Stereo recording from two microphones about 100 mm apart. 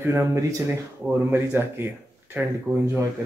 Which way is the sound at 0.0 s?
25° right (ahead or behind).